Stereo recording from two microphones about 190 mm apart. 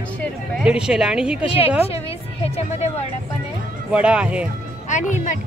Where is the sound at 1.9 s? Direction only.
30° left (ahead or behind).